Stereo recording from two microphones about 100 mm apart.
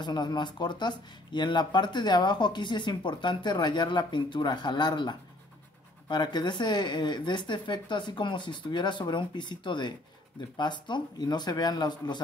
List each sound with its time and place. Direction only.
0.0 s speech: 45° left (ahead or behind)